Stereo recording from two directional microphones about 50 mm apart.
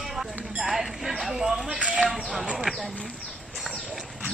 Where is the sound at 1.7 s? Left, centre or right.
Right.